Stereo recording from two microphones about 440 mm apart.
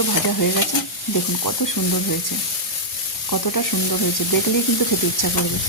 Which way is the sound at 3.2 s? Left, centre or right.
Left.